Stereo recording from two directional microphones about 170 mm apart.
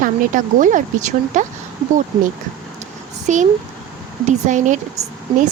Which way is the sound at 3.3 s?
45° right (ahead or behind).